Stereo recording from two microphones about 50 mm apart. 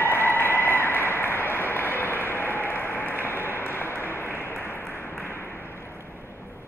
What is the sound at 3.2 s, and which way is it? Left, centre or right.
Applause, left.